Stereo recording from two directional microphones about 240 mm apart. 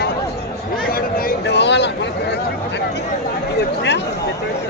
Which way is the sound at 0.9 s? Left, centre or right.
Left.